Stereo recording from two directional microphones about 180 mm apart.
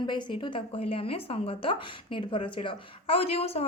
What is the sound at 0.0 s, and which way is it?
A woman's voice, 25° left (ahead or behind).